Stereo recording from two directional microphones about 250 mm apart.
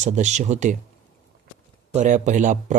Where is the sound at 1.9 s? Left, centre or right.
Right.